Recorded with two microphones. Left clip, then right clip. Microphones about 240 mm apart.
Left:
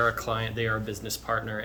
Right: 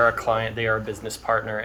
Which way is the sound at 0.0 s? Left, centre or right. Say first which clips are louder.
Right 6 dB; centre.